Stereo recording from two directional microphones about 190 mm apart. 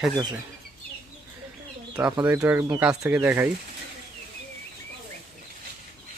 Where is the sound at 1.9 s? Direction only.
5° right (ahead or behind).